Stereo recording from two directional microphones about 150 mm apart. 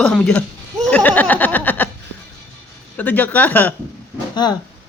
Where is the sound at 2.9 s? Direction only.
10° left (ahead or behind).